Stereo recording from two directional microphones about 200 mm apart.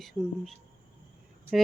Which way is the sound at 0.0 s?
Centre (ahead or behind).